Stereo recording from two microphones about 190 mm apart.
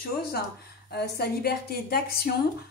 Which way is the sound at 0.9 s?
55° left (ahead or behind).